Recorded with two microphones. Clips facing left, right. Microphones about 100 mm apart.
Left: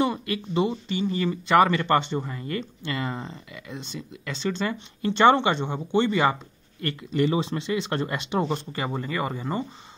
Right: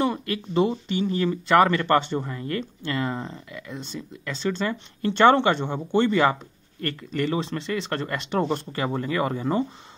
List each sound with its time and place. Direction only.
0.0 s speech: 5° left (ahead or behind)